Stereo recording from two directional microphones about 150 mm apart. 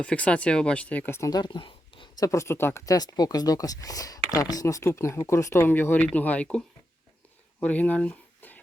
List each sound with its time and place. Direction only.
0.0 s speech: 10° left (ahead or behind); by 2.2 s 35° left (ahead or behind)
2.2 s speech: 20° left (ahead or behind)
7.6 s speech: 10° left (ahead or behind)